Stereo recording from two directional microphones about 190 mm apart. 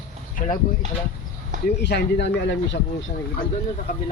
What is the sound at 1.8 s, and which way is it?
Speech, 65° left (ahead or behind).